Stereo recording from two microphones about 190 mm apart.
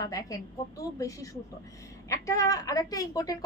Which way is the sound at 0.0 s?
20° left (ahead or behind).